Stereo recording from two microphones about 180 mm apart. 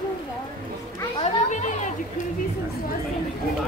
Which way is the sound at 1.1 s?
40° left (ahead or behind).